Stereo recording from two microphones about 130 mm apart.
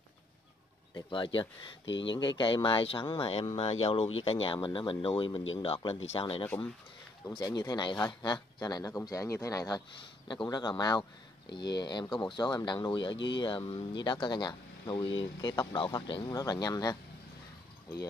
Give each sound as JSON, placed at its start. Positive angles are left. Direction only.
{"t": 0.9, "sound": "speech", "side_deg": 40}
{"t": 7.3, "sound": "speech", "side_deg": 30}